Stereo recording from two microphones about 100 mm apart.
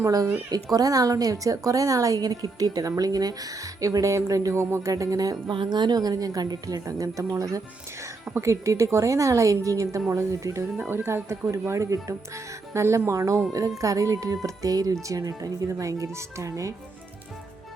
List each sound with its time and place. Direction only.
0.0 s a woman's voice: 40° right (ahead or behind)
5.5 s a woman's voice: 50° right (ahead or behind); by 16.7 s 30° right (ahead or behind)